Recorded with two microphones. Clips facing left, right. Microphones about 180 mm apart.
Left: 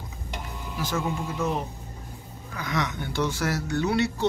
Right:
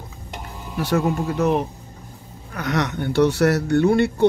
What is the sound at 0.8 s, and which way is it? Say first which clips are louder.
Speech: right 8 dB; 65° right (ahead or behind).